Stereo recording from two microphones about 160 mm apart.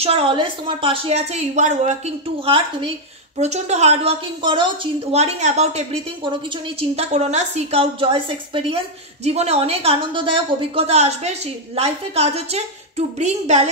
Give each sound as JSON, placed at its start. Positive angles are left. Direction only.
{"t": 0.0, "sound": "a woman's voice", "side_deg": -35}
{"t": 5.1, "sound": "a woman's voice", "side_deg": -45}